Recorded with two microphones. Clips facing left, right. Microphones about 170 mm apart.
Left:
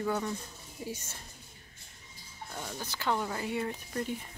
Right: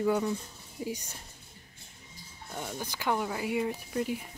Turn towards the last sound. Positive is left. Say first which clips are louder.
# right 3 dB
turn(degrees=-10)  # may be behind; listen again after turning